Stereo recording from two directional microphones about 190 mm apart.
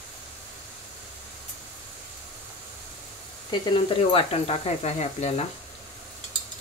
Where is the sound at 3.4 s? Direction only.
30° left (ahead or behind).